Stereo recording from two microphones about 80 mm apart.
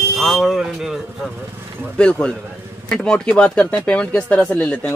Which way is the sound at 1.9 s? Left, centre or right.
Centre.